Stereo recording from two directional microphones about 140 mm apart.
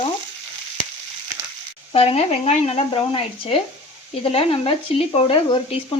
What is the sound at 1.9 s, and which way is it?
Speech, 45° left (ahead or behind).